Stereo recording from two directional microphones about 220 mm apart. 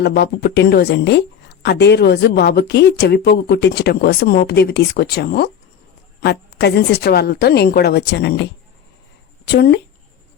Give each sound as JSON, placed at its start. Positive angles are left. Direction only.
{"t": 0.0, "sound": "speech", "side_deg": 50}
{"t": 9.5, "sound": "speech", "side_deg": 50}